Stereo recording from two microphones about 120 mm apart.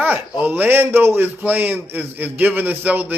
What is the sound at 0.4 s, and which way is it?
A man's voice, 15° right (ahead or behind).